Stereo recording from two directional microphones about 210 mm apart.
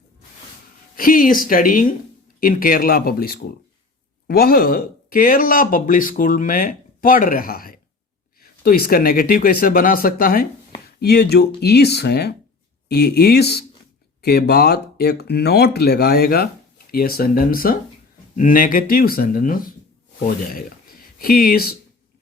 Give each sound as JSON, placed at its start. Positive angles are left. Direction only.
{"t": 0.9, "sound": "speech", "side_deg": 40}